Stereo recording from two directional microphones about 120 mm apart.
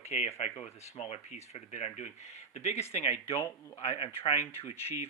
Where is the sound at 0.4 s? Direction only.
60° left (ahead or behind).